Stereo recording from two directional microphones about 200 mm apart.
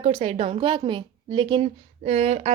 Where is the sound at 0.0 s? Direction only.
25° right (ahead or behind).